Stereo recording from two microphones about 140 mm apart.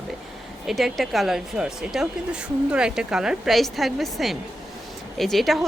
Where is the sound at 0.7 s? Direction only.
Centre (ahead or behind).